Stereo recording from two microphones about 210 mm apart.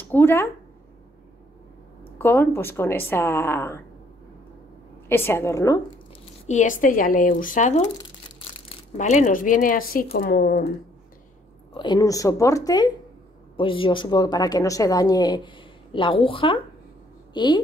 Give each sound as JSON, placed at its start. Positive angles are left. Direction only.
{"t": 0.0, "sound": "speech", "side_deg": 10}
{"t": 2.1, "sound": "speech", "side_deg": 10}
{"t": 5.0, "sound": "speech", "side_deg": 10}
{"t": 6.4, "sound": "speech", "side_deg": 35}
{"t": 11.7, "sound": "a woman's voice", "side_deg": 20}